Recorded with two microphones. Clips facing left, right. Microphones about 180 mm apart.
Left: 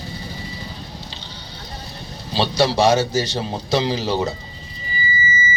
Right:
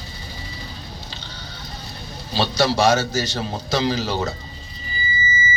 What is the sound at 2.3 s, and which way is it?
Speech, 25° left (ahead or behind).